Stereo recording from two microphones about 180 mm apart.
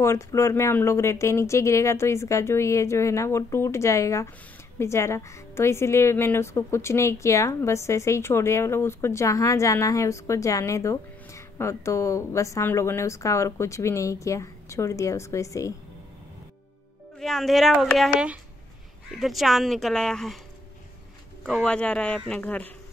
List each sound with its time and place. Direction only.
0.0 s a woman's voice: 15° left (ahead or behind)
17.2 s speech: centre (ahead or behind)
21.5 s a woman's voice: centre (ahead or behind)